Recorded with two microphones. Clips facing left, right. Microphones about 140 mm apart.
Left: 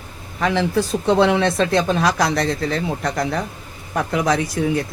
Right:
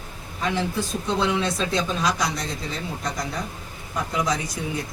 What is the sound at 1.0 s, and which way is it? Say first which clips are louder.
Speech: left 8 dB; 65° left (ahead or behind).